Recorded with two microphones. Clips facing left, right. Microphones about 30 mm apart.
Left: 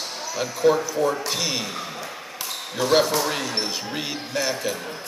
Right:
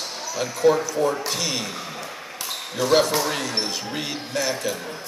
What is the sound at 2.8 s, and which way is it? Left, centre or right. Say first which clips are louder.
Speech: even; centre.